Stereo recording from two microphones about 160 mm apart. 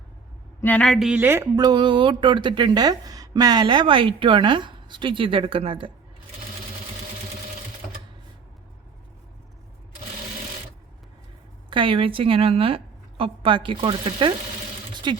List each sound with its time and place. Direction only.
0.6 s speech: 10° left (ahead or behind); by 5.9 s 35° right (ahead or behind)
11.7 s a woman's voice: 35° right (ahead or behind)